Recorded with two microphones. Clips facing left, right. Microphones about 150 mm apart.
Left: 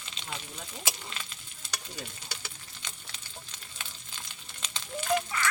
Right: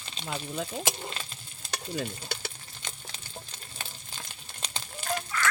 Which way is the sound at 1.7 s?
55° right (ahead or behind).